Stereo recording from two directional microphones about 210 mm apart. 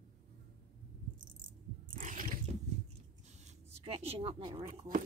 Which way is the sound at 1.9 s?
40° right (ahead or behind).